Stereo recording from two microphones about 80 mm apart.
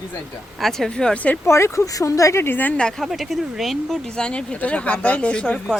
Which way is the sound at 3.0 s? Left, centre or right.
Centre.